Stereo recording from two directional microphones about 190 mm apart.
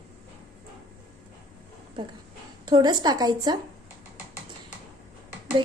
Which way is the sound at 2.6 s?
20° right (ahead or behind).